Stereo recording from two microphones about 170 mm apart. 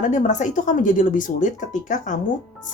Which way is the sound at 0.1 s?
45° left (ahead or behind).